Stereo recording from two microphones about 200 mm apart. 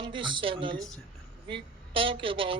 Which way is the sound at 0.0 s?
25° right (ahead or behind).